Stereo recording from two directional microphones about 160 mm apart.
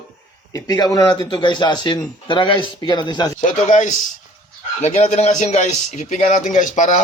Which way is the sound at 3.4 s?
50° left (ahead or behind).